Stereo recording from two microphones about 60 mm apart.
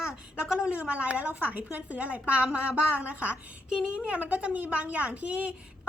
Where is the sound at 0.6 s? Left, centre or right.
Centre.